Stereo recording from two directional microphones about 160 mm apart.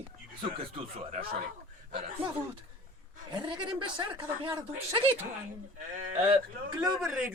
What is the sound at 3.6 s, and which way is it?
Speech, 30° right (ahead or behind).